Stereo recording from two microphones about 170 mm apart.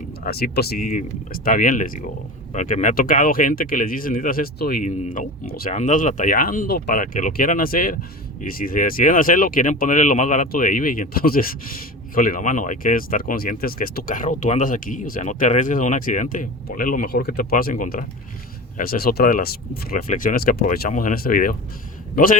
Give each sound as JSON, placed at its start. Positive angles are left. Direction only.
{"t": 0.3, "sound": "speech", "side_deg": 70}
{"t": 5.7, "sound": "a man's voice", "side_deg": 45}